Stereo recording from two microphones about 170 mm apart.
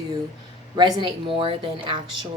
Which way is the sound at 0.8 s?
25° right (ahead or behind).